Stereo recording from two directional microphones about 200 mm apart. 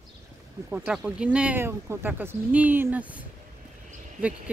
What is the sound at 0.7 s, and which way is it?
Speech, 10° right (ahead or behind).